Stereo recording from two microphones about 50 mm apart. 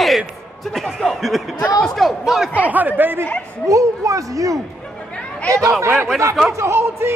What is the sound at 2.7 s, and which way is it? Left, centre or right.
Speech, right.